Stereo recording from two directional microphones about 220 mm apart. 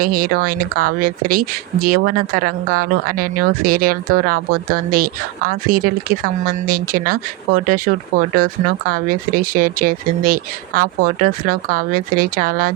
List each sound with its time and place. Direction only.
0.0 s speech: 40° right (ahead or behind)